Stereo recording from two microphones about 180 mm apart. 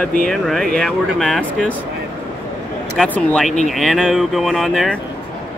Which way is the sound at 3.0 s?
5° left (ahead or behind).